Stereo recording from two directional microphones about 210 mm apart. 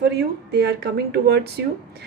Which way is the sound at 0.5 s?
50° right (ahead or behind).